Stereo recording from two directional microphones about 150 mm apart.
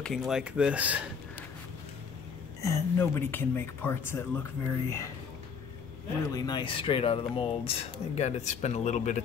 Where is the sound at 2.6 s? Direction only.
15° left (ahead or behind).